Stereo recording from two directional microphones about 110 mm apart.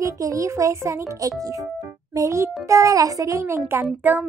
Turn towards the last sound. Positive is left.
turn(degrees=-20)  # may be behind; listen again after turning